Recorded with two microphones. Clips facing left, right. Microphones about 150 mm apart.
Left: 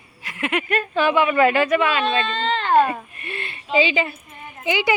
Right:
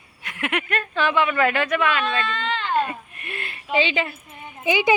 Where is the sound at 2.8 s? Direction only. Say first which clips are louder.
Left 6 dB; 70° left (ahead or behind).